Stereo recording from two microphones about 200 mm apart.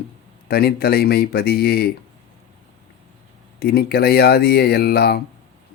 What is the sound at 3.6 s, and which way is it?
Speech, 50° left (ahead or behind).